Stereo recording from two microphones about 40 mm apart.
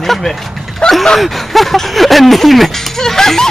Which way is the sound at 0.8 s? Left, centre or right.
Left.